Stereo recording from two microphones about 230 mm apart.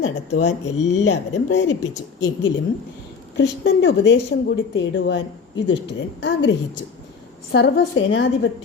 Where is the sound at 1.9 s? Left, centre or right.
Centre.